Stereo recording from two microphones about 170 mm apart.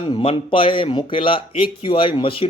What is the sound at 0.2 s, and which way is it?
Speech, 35° left (ahead or behind).